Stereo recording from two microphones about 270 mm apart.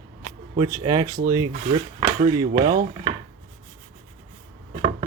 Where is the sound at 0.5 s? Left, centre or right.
Centre.